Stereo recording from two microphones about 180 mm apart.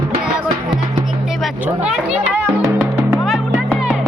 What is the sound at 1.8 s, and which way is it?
Music, 5° right (ahead or behind).